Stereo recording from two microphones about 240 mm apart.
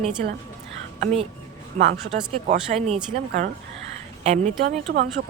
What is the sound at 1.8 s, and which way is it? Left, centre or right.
Speech, right.